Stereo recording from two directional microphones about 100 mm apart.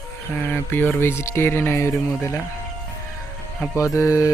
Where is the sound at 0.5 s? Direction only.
20° left (ahead or behind).